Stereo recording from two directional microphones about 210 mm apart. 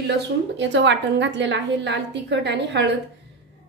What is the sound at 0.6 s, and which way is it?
A woman's voice, 60° right (ahead or behind).